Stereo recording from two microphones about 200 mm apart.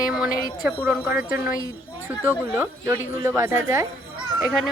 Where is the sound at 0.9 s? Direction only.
5° right (ahead or behind).